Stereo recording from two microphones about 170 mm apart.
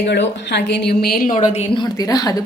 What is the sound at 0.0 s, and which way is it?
A woman's voice, 80° left.